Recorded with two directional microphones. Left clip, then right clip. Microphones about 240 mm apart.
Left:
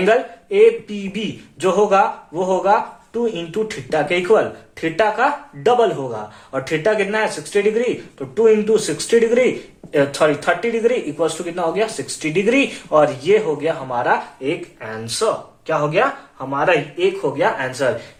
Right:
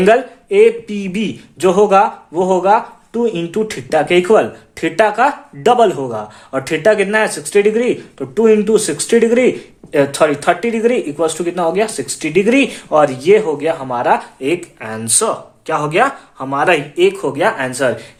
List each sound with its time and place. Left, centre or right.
0.0 s speech: right